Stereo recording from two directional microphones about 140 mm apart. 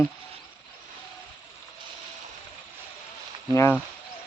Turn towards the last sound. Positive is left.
turn(degrees=20)  # may be behind; listen again after turning